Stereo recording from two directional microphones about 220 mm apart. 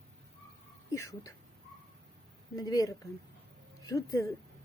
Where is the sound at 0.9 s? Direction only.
15° left (ahead or behind).